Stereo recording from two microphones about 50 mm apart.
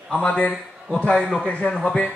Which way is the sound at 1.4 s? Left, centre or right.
Left.